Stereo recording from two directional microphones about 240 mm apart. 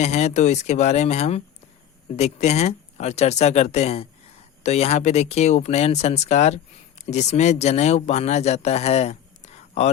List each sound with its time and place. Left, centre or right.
0.0 s speech: left